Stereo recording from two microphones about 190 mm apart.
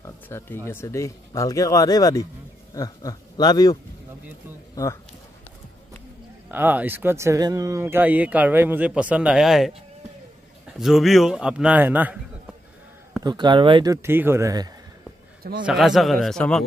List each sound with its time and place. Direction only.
0.0 s music: 15° left (ahead or behind)
0.7 s speech: 15° left (ahead or behind)
6.5 s speech: 10° right (ahead or behind)
10.8 s a man's voice: centre (ahead or behind)
13.2 s speech: 20° right (ahead or behind)
14.0 s speech: 10° right (ahead or behind)
15.6 s a man's voice: centre (ahead or behind)